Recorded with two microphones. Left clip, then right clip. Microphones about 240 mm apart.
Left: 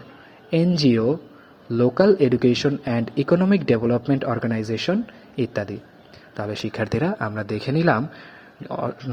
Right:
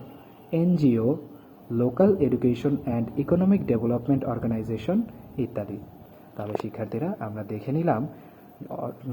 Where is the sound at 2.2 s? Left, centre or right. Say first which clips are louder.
Left 6 dB; left.